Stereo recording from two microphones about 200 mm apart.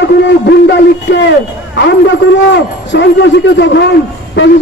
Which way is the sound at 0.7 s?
60° left (ahead or behind).